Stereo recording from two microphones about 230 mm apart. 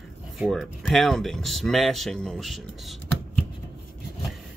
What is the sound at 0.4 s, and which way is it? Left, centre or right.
Speech, centre.